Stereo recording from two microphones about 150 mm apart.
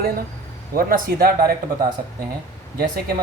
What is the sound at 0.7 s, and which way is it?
Speech, 75° right (ahead or behind).